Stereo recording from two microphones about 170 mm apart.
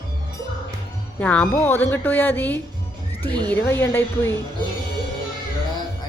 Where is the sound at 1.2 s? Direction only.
10° left (ahead or behind).